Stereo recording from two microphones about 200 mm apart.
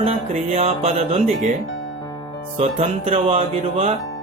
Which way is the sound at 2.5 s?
30° right (ahead or behind).